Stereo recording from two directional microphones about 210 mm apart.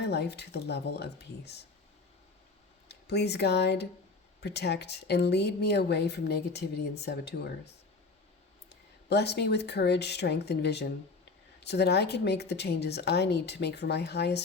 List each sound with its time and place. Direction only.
0.0 s a woman's voice: 55° left (ahead or behind)
2.9 s a woman's voice: 50° left (ahead or behind)
8.7 s a woman's voice: 50° left (ahead or behind)